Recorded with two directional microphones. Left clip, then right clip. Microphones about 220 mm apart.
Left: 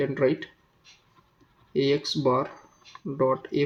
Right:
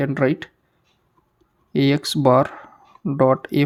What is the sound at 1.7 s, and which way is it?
Speech, 50° right (ahead or behind).